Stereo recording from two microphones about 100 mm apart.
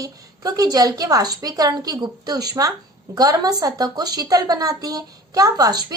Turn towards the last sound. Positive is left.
turn(degrees=-40)  # may be behind; listen again after turning